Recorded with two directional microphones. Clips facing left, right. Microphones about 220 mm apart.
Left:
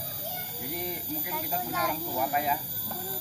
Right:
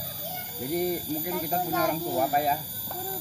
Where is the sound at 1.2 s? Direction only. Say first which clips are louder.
Right 5 dB; 40° right (ahead or behind).